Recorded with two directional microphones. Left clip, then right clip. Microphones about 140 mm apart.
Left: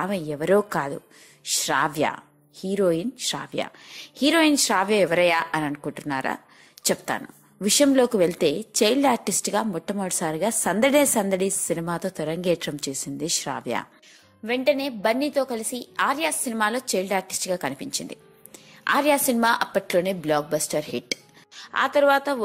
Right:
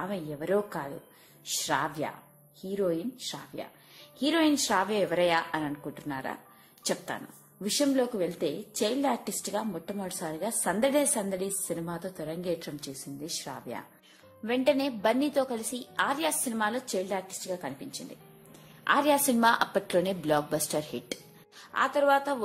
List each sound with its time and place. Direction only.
0.0 s a woman's voice: 35° left (ahead or behind)
4.2 s a woman's voice: 35° left (ahead or behind)
14.4 s a woman's voice: 5° left (ahead or behind); by 18.0 s 35° left (ahead or behind)
18.9 s a woman's voice: 20° left (ahead or behind)
20.9 s speech: 25° left (ahead or behind)